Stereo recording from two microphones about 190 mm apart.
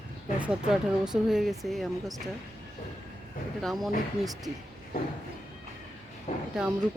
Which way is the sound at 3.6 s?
Centre (ahead or behind).